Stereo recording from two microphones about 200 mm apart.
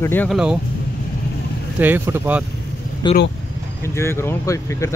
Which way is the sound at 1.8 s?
10° right (ahead or behind).